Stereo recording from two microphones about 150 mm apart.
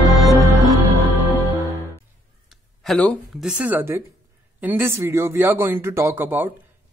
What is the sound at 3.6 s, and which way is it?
Speech, 10° right (ahead or behind).